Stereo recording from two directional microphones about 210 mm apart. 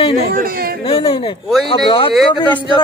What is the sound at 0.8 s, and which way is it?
Speech, 25° left (ahead or behind).